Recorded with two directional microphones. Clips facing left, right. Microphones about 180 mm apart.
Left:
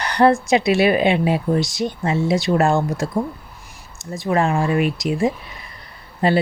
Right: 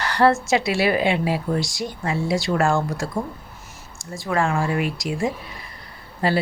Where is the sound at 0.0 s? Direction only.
20° left (ahead or behind).